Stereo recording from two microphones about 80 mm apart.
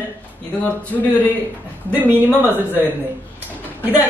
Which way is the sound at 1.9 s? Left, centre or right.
Right.